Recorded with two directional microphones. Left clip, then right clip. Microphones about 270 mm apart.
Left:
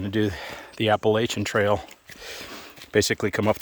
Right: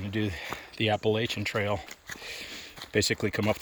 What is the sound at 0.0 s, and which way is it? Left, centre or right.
Speech, left.